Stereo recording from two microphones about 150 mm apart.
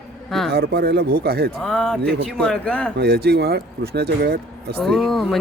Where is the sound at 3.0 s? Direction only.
90° right.